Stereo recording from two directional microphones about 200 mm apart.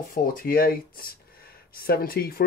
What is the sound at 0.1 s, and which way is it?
Speech, 45° left (ahead or behind).